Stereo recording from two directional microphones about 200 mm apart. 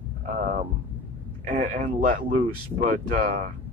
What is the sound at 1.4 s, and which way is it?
Speech, 40° right (ahead or behind).